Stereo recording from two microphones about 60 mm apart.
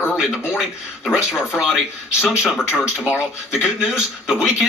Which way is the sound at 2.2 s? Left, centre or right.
Centre.